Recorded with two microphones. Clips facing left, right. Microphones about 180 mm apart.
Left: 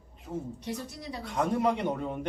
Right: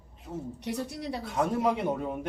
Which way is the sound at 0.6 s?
70° right (ahead or behind).